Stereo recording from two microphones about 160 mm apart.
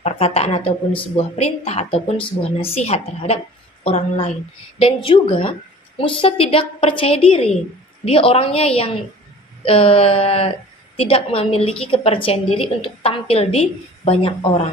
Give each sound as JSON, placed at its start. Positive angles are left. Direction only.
{"t": 0.0, "sound": "a woman's voice", "side_deg": 40}